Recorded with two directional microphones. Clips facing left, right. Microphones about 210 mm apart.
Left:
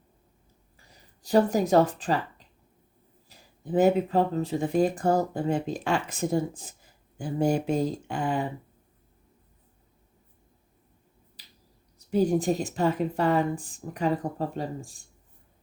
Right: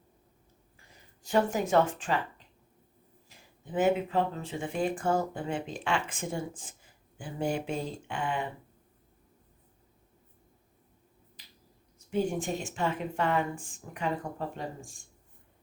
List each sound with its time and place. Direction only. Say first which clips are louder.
1.2 s speech: left 5 dB; 35° left (ahead or behind)
3.2 s speech: left 10 dB; 35° left (ahead or behind)
11.9 s speech: left 6 dB; 35° left (ahead or behind)